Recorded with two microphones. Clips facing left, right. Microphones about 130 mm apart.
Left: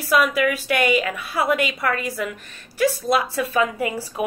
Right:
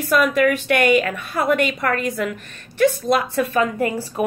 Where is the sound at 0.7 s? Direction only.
55° right (ahead or behind).